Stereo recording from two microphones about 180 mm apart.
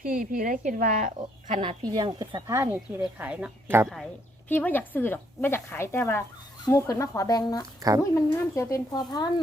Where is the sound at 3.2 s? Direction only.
5° right (ahead or behind).